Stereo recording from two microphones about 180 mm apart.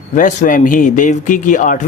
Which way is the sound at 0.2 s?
45° left (ahead or behind).